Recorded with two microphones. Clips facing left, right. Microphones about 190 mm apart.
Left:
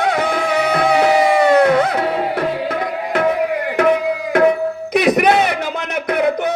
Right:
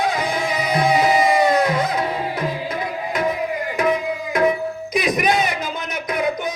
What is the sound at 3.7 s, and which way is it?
Tabla, 65° left (ahead or behind).